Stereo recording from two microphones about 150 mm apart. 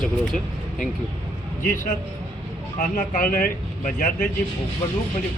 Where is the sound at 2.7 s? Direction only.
70° left (ahead or behind).